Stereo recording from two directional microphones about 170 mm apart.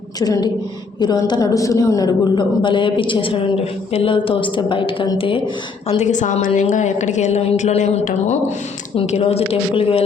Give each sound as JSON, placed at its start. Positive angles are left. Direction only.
{"t": 0.2, "sound": "a woman's voice", "side_deg": 20}
{"t": 6.0, "sound": "a woman's voice", "side_deg": 45}